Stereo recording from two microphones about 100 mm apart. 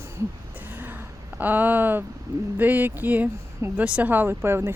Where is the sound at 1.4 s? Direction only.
20° right (ahead or behind).